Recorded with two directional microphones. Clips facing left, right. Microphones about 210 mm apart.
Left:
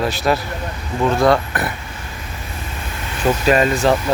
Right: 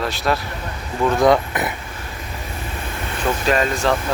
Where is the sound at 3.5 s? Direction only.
5° left (ahead or behind).